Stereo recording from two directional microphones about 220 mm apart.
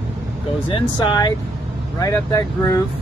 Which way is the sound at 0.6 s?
20° left (ahead or behind).